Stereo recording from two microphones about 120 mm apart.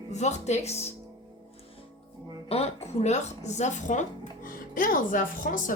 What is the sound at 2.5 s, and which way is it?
Speech, 65° left (ahead or behind).